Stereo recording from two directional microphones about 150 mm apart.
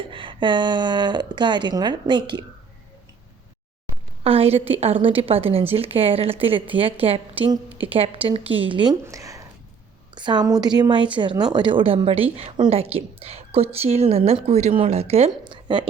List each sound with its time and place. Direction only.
0.1 s a woman's voice: 35° right (ahead or behind)
4.2 s a woman's voice: 40° right (ahead or behind)
9.0 s a woman's voice: 20° right (ahead or behind)